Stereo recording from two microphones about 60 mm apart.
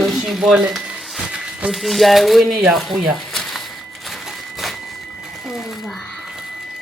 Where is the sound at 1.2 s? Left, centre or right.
Centre.